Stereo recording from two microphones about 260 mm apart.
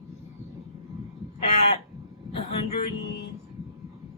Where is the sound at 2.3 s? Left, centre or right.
Left.